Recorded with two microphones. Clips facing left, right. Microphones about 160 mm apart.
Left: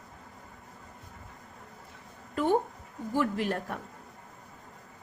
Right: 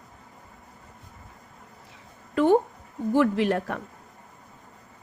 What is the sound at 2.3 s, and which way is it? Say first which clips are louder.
A woman's voice: right 7 dB; 90° right.